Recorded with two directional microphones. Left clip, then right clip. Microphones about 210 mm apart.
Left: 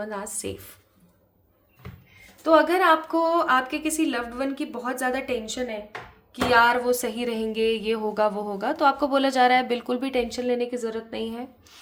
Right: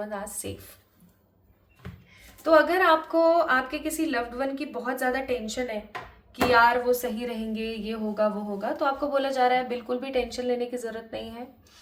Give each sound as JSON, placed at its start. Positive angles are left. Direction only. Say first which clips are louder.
{"t": 0.0, "sound": "a woman's voice", "louder": "left 1 dB", "side_deg": 25}
{"t": 2.4, "sound": "a woman's voice", "louder": "left 1 dB", "side_deg": 30}